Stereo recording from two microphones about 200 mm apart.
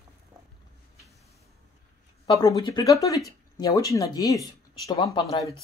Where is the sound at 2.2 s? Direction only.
20° left (ahead or behind).